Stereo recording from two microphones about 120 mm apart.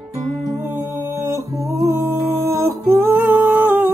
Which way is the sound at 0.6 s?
20° right (ahead or behind).